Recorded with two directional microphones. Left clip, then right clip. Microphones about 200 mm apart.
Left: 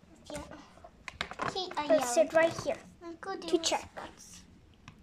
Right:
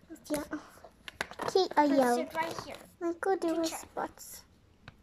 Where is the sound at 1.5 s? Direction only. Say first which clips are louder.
Right 9 dB; 40° right (ahead or behind).